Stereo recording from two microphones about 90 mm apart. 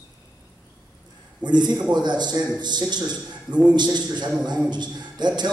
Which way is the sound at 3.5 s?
15° right (ahead or behind).